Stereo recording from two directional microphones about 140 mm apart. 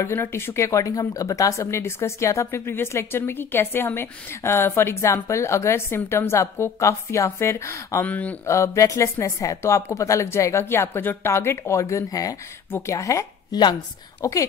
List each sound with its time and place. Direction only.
0.0 s speech: 20° left (ahead or behind)
8.5 s speech: 20° left (ahead or behind)